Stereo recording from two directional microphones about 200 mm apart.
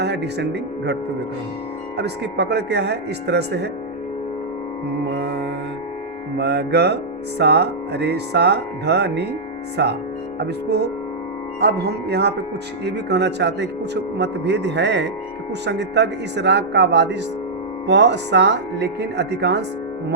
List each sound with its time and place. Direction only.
0.0 s speech: 55° right (ahead or behind)
2.0 s music: 55° right (ahead or behind)
5.1 s music: 55° right (ahead or behind)